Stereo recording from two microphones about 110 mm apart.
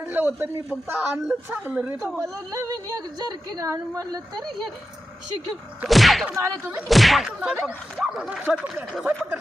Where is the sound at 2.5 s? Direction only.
30° right (ahead or behind).